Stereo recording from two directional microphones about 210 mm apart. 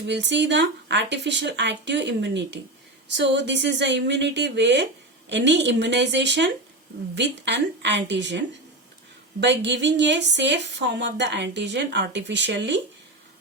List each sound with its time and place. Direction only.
0.1 s speech: 55° right (ahead or behind)